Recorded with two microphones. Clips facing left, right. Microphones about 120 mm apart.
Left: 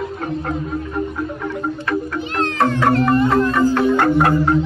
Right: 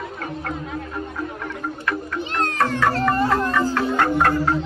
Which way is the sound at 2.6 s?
25° left (ahead or behind).